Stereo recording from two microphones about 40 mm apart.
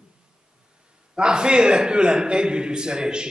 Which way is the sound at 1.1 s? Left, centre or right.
Right.